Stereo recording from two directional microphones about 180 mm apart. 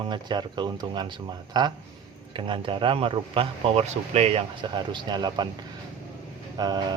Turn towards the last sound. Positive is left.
turn(degrees=-25)  # may be behind; listen again after turning